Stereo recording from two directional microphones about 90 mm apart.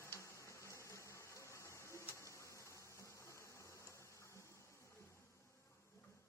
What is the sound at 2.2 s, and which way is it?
Insect, 35° left (ahead or behind).